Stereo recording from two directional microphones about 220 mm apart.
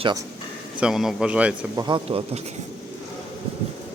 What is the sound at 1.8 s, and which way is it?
Speech, 20° right (ahead or behind).